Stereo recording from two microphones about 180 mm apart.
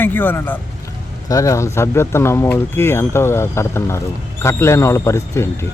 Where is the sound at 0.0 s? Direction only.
10° left (ahead or behind).